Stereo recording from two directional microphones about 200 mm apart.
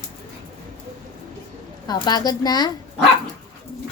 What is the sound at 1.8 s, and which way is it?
Speech, 20° left (ahead or behind).